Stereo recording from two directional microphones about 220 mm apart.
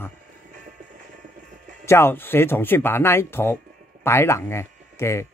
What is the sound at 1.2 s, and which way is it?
Music, 35° right (ahead or behind).